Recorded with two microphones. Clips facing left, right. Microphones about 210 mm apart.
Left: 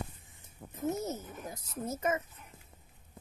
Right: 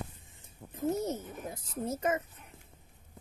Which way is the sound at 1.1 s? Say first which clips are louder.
Right 3 dB; 30° right (ahead or behind).